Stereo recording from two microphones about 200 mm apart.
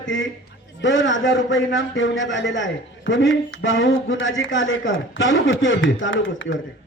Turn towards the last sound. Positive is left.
turn(degrees=70)  # may be behind; listen again after turning